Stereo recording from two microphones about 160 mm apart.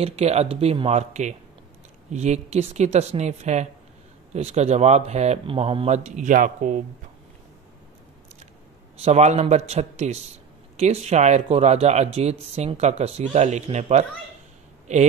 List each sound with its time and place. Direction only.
0.0 s speech: 40° right (ahead or behind)
8.9 s speech: 45° right (ahead or behind)